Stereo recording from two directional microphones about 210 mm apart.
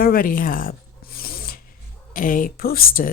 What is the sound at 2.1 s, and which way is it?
Speech, 40° left (ahead or behind).